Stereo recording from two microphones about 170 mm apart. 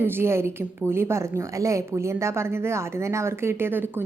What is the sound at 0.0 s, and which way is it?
A woman's voice, 15° right (ahead or behind).